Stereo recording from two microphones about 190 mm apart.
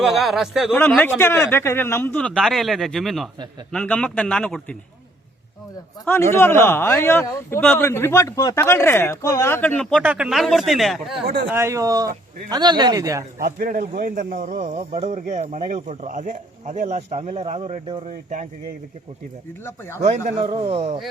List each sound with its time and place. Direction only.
0.0 s speech: centre (ahead or behind)
6.1 s speech: 10° left (ahead or behind)
10.0 s speech: 5° right (ahead or behind)
11.4 s speech: 15° right (ahead or behind)
13.4 s speech: 50° right (ahead or behind)
19.6 s speech: 10° left (ahead or behind)
20.0 s speech: 35° right (ahead or behind)